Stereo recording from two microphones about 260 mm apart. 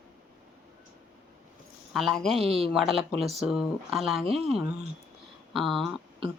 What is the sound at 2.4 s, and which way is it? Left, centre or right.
Speech, right.